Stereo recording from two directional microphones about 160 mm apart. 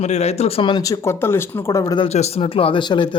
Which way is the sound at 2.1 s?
40° left (ahead or behind).